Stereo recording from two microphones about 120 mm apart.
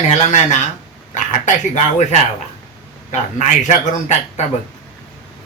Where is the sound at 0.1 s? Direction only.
80° left.